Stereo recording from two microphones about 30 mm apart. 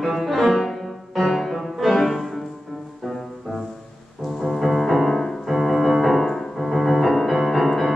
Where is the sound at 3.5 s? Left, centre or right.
Centre.